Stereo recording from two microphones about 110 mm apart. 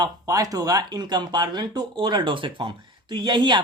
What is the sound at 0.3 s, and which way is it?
Speech, 35° right (ahead or behind).